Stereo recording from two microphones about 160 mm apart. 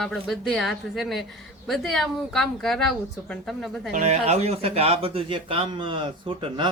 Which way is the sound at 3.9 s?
45° right (ahead or behind).